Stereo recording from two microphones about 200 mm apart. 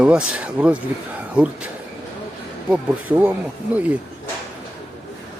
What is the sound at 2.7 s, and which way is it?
Speech, 10° right (ahead or behind).